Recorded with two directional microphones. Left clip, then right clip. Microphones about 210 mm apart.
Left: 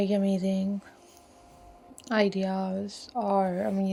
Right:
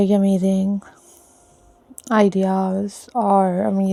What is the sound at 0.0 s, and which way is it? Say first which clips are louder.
Speech: right 9 dB; 50° right (ahead or behind).